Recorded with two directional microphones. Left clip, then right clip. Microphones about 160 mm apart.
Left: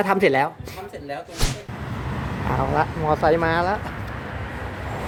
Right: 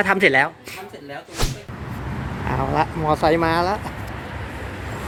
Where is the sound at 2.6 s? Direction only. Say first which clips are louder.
Right 1 dB; 20° right (ahead or behind).